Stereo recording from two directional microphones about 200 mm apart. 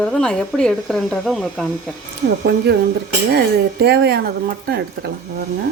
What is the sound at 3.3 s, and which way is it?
Speech, 55° right (ahead or behind).